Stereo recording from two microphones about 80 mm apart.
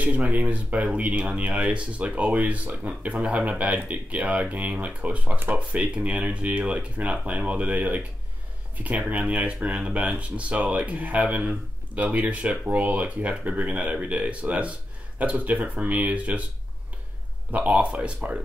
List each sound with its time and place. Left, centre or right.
0.0 s speech: centre
17.5 s speech: centre